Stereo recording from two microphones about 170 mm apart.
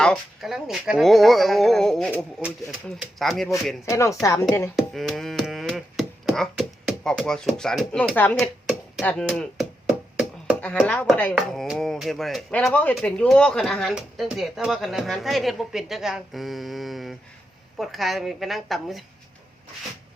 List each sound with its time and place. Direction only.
0.0 s speech: centre (ahead or behind)
2.4 s speech: 5° right (ahead or behind)
3.8 s speech: 15° left (ahead or behind)
4.8 s a sound: centre (ahead or behind)
9.0 s speech: 5° left (ahead or behind)